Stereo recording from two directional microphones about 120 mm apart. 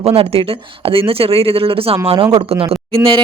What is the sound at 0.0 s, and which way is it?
Speech, 55° right (ahead or behind).